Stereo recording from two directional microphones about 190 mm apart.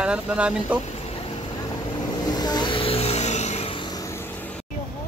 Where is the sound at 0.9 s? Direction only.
30° left (ahead or behind); by 4.6 s 10° left (ahead or behind).